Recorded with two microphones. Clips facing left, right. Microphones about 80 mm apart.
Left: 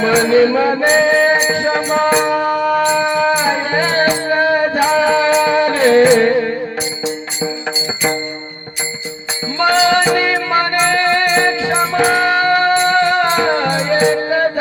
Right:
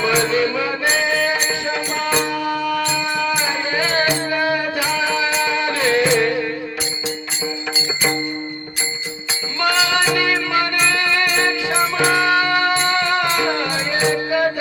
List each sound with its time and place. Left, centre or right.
0.0 s music: left
9.6 s music: left